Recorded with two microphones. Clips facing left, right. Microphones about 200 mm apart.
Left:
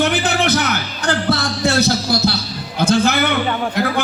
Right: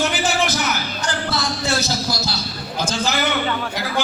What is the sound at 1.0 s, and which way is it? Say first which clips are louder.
Music: left 9 dB; 60° left (ahead or behind).